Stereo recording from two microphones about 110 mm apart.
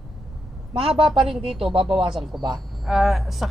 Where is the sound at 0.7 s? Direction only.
55° right (ahead or behind).